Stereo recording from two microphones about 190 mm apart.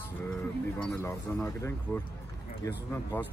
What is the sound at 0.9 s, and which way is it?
Speech, 15° left (ahead or behind).